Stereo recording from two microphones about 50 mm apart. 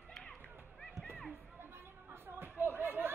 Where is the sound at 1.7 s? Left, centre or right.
Right.